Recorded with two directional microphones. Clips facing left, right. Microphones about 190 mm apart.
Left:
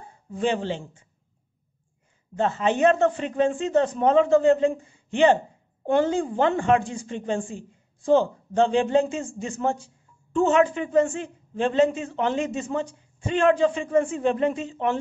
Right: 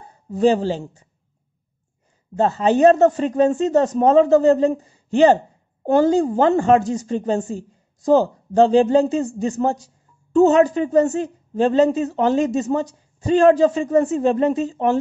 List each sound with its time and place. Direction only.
0.3 s a woman's voice: 40° right (ahead or behind)
2.3 s a woman's voice: 40° right (ahead or behind)